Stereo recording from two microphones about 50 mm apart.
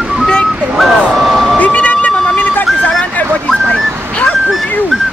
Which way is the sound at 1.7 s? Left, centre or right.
Left.